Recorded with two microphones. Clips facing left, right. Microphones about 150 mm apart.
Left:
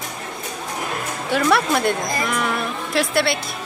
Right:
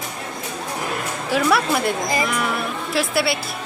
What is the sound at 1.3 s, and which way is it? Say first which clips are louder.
A woman's voice: left 1 dB; centre (ahead or behind).